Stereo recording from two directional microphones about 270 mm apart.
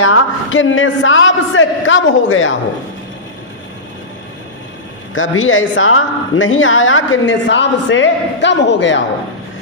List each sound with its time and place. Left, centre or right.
0.0 s a man's voice: left
5.1 s a man's voice: left